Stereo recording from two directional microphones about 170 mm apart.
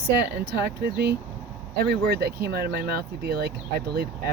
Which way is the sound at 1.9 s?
70° right (ahead or behind).